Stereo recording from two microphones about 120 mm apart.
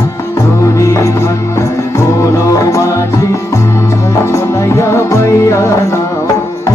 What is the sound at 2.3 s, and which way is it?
Music, 25° left (ahead or behind).